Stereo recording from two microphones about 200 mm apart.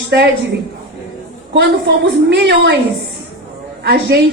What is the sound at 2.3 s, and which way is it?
Speech, 55° right (ahead or behind).